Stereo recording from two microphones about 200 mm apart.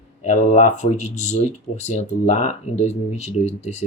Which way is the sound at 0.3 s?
35° left (ahead or behind).